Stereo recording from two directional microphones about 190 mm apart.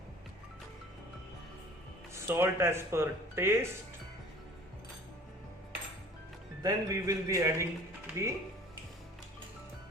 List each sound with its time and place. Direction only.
2.1 s speech: 10° right (ahead or behind)
6.6 s speech: 20° right (ahead or behind)